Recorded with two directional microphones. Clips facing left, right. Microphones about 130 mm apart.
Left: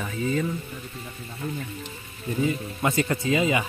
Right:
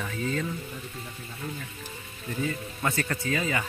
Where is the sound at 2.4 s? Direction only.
15° left (ahead or behind).